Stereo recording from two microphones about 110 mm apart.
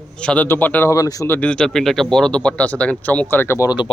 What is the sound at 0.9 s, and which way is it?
Speech, 30° left (ahead or behind).